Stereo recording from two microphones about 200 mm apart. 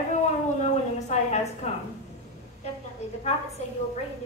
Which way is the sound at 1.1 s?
35° left (ahead or behind).